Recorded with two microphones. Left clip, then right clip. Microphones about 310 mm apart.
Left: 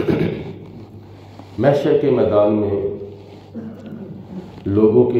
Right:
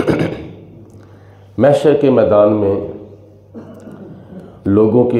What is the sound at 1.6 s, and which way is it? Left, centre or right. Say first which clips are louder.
Speech: right 5 dB; right.